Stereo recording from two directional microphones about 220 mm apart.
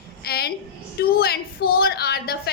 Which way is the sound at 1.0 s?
45° left (ahead or behind).